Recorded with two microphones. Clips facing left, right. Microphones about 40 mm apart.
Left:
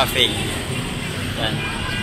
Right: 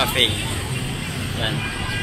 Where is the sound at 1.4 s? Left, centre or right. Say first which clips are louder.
Left 1 dB; centre.